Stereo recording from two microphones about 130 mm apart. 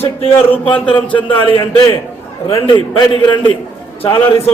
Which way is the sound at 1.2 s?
40° left (ahead or behind).